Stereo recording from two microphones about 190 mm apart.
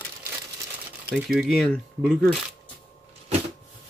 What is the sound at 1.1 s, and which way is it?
Speech, centre (ahead or behind).